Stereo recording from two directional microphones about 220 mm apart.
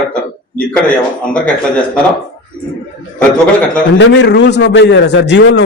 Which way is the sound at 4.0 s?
55° left (ahead or behind).